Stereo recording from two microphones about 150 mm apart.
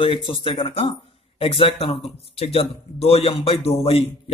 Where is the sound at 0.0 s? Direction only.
35° left (ahead or behind).